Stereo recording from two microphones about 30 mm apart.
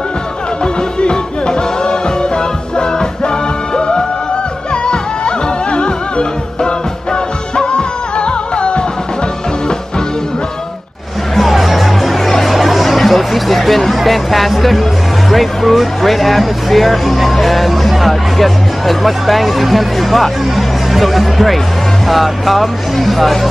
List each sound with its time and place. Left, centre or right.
0.7 s music: left
11.3 s music: centre
13.9 s speech: centre